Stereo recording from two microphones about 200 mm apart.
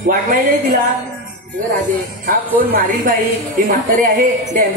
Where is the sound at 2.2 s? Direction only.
45° right (ahead or behind).